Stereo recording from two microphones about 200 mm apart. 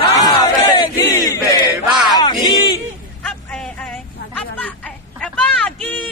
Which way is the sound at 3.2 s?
5° left (ahead or behind).